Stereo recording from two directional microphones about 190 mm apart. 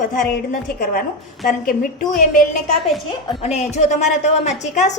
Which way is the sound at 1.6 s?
45° left (ahead or behind).